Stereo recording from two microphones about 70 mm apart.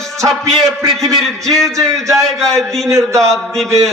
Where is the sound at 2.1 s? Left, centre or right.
Centre.